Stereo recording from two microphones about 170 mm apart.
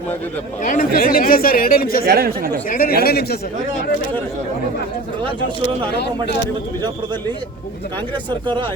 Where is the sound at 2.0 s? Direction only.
65° right (ahead or behind).